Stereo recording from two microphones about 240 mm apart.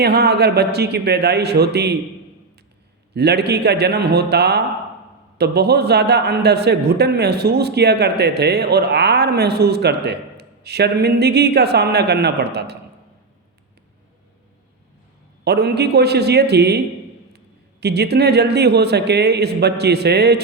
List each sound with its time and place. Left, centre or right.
0.0 s a man's voice: right
3.2 s a man's voice: right
15.4 s a man's voice: right